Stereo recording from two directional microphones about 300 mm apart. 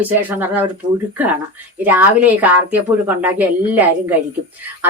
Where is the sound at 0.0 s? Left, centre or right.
Centre.